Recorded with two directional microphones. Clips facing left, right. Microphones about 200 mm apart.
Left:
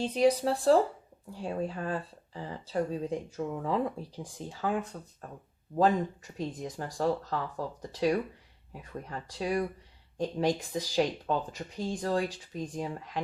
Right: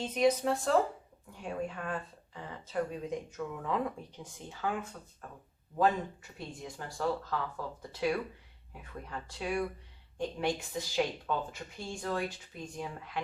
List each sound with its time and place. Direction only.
0.0 s speech: 35° left (ahead or behind)
6.6 s speech: 40° left (ahead or behind)